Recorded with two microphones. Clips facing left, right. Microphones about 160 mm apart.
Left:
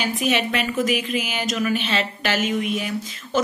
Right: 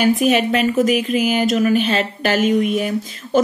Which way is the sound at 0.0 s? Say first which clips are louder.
Right 7 dB; 45° right (ahead or behind).